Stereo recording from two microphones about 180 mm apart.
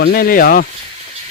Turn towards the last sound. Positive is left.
turn(degrees=50)  # may be behind; listen again after turning